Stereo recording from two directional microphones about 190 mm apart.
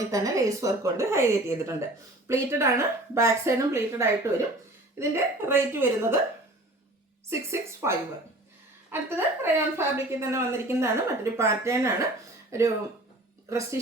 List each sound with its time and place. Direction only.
0.0 s a woman's voice: 15° right (ahead or behind)
7.3 s a woman's voice: 15° right (ahead or behind)